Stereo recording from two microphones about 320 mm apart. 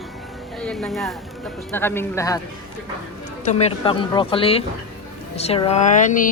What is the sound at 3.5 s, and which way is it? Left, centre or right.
Speech, centre.